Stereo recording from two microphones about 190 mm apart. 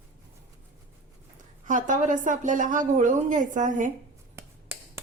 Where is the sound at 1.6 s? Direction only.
40° right (ahead or behind).